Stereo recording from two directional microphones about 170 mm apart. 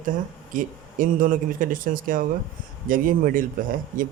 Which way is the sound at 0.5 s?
55° right (ahead or behind).